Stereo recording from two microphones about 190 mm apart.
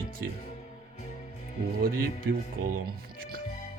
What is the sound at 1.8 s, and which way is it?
Speech, 50° right (ahead or behind).